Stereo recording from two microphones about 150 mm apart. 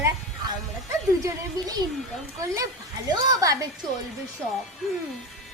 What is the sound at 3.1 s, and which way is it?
Speech, 20° right (ahead or behind).